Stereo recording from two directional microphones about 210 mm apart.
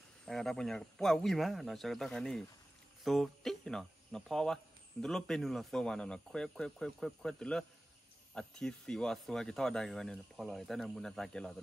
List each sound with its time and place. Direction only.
0.2 s speech: centre (ahead or behind)